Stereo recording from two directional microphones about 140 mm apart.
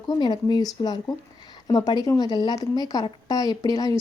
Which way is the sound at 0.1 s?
30° left (ahead or behind).